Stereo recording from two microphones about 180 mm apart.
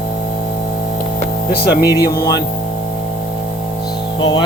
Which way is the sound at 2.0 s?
20° left (ahead or behind).